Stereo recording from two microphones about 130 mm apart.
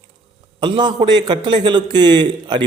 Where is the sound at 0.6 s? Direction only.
35° right (ahead or behind).